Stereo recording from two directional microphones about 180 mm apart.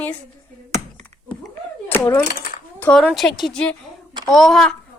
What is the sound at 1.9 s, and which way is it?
Speech, 10° left (ahead or behind).